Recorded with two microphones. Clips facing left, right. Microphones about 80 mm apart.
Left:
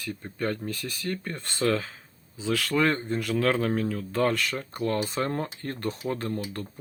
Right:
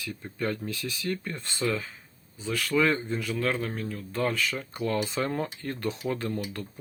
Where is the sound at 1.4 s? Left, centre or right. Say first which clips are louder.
Left 3 dB; left.